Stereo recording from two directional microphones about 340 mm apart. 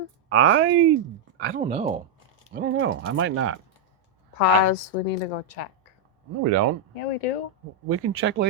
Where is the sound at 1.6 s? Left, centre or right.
Centre.